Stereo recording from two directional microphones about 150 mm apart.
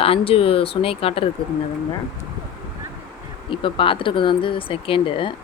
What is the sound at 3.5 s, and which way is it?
Speech, 35° left (ahead or behind).